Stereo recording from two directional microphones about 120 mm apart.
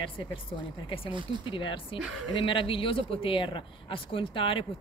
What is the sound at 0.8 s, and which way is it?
Speech, 50° left (ahead or behind).